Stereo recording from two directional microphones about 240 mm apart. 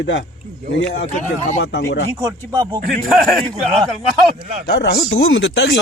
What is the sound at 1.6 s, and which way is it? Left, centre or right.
Speech, left.